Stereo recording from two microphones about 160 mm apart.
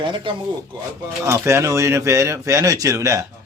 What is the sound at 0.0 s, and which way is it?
Speech, 30° right (ahead or behind).